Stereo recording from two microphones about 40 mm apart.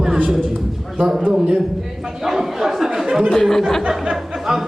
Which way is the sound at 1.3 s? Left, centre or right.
Centre.